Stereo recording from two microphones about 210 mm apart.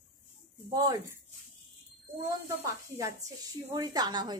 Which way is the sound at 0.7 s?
20° right (ahead or behind).